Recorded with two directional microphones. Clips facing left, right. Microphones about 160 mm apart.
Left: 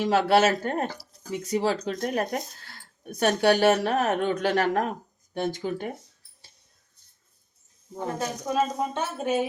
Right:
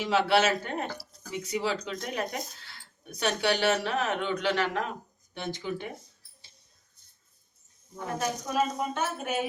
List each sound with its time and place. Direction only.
0.0 s speech: 45° left (ahead or behind)
7.9 s speech: 30° left (ahead or behind)